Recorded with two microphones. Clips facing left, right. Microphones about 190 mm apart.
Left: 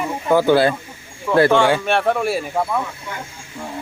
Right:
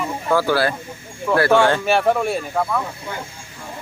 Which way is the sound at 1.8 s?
Centre (ahead or behind).